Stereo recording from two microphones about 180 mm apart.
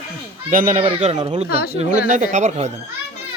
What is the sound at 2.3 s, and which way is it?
Speech, 40° right (ahead or behind).